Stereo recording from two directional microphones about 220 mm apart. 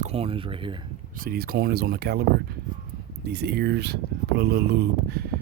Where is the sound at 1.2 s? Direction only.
45° right (ahead or behind).